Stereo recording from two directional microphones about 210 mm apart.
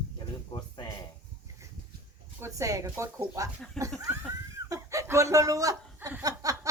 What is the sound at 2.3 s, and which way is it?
Speech, 15° right (ahead or behind).